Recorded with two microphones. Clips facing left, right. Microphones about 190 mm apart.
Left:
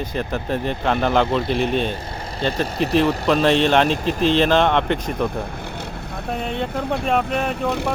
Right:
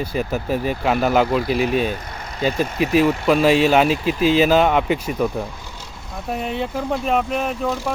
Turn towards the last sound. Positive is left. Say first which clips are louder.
# left 1 dB
turn(degrees=65)  # may be behind; listen again after turning